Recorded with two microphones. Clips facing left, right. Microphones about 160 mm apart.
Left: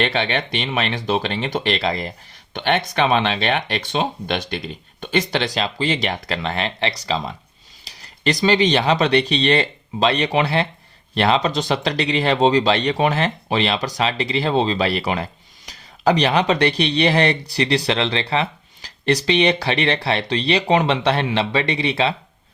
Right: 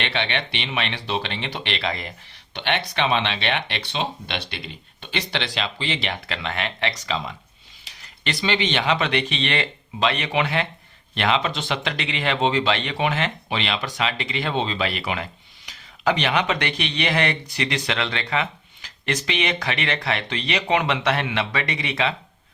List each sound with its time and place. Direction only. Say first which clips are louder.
0.0 s speech: left 5 dB; 40° left (ahead or behind)